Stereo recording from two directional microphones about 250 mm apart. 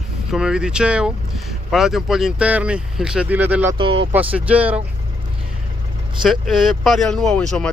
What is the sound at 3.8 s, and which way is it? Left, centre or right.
Speech, right.